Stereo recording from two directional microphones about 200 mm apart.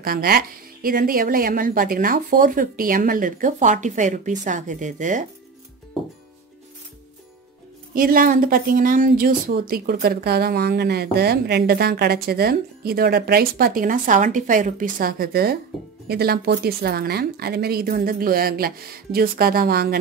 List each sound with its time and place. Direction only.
0.0 s speech: 50° right (ahead or behind)
7.9 s speech: 45° right (ahead or behind)